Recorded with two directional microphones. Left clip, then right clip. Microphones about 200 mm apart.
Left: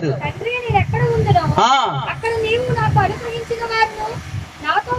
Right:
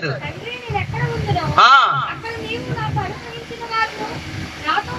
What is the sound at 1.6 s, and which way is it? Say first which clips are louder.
Speech: right 6 dB; 25° left (ahead or behind).